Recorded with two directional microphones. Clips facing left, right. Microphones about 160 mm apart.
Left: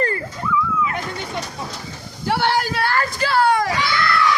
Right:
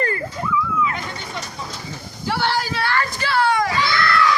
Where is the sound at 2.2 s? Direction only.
55° left (ahead or behind).